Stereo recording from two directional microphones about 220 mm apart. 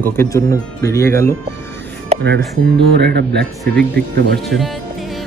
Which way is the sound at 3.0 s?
50° right (ahead or behind).